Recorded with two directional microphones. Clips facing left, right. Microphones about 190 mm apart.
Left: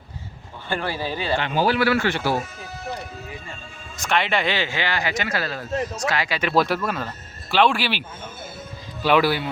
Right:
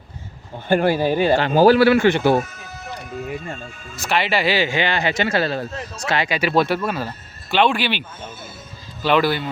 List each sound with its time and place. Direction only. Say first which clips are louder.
0.7 s speech: right 9 dB; 45° right (ahead or behind)
1.8 s a man's voice: right 7 dB; 20° right (ahead or behind)
2.4 s music: right 2 dB; 30° left (ahead or behind)
3.9 s a man's voice: right 2 dB; 5° right (ahead or behind); by 6.4 s 20° right (ahead or behind)
6.4 s speech: right 1 dB; centre (ahead or behind)
9.0 s a man's voice: right 1 dB; 10° left (ahead or behind)